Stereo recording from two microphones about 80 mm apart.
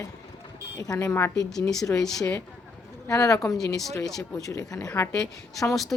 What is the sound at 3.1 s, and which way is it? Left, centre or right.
A woman's voice, left.